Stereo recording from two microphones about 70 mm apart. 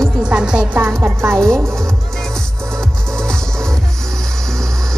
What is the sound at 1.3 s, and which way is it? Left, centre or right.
Speech, centre.